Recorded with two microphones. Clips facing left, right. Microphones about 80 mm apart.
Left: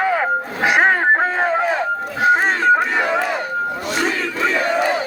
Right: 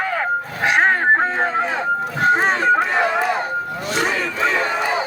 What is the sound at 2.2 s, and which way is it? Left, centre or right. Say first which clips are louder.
Music: left 2 dB; centre.